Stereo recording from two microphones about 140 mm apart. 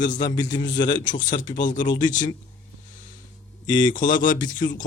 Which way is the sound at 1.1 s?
65° left (ahead or behind).